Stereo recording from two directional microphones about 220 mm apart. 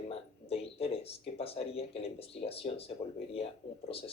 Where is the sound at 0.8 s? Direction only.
25° left (ahead or behind).